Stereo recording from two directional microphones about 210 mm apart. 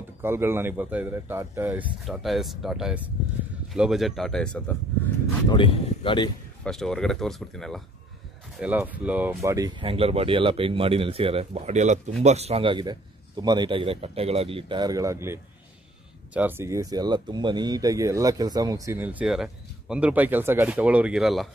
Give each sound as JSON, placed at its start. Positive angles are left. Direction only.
{"t": 0.2, "sound": "speech", "side_deg": -10}
{"t": 5.5, "sound": "speech", "side_deg": 20}
{"t": 6.6, "sound": "speech", "side_deg": 0}